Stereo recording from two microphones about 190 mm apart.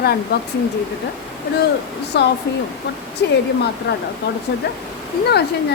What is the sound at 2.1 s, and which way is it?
Speech, 60° left (ahead or behind).